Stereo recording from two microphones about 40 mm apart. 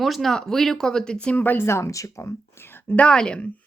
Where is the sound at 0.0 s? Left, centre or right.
Centre.